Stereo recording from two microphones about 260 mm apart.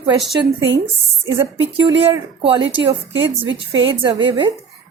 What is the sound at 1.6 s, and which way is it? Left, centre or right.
Speech, centre.